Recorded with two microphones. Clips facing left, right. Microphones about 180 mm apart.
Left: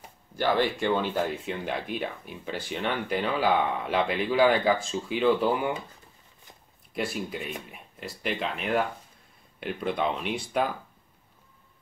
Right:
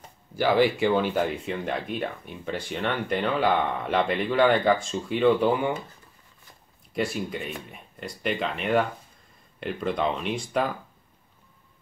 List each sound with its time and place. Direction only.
0.4 s speech: 10° right (ahead or behind)
6.9 s speech: centre (ahead or behind)